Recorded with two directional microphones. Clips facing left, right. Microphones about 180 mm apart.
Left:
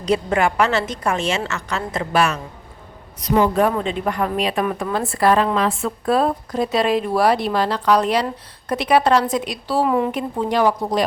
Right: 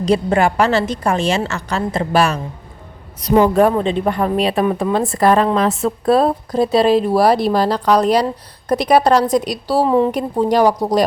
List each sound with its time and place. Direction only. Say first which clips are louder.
0.0 s a woman's voice: right 4 dB; 35° right (ahead or behind)
5.0 s a woman's voice: right 2 dB; 40° right (ahead or behind)